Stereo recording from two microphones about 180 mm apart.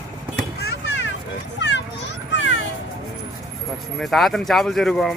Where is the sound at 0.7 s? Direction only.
90° left.